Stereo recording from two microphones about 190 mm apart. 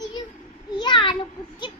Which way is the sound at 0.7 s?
25° left (ahead or behind).